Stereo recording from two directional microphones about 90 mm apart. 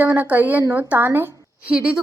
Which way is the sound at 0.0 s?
20° right (ahead or behind).